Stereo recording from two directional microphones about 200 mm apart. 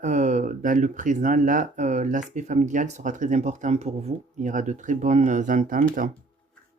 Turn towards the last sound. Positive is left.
turn(degrees=-40)  # may be behind; listen again after turning